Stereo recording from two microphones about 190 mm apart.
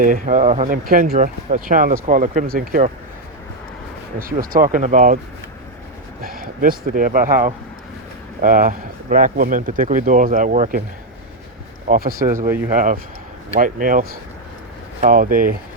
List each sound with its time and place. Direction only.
0.0 s speech: 45° right (ahead or behind)
4.2 s speech: 50° right (ahead or behind)
6.2 s speech: 50° right (ahead or behind)
11.9 s speech: 50° right (ahead or behind)
15.0 s speech: 45° right (ahead or behind)